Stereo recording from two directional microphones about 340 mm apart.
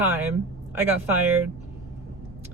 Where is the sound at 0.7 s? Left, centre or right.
Centre.